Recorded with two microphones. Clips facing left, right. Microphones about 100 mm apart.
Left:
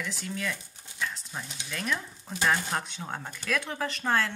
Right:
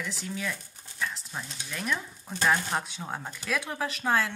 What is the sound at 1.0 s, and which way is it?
Sizzle, centre (ahead or behind).